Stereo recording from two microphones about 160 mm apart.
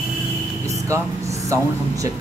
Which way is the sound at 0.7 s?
20° right (ahead or behind).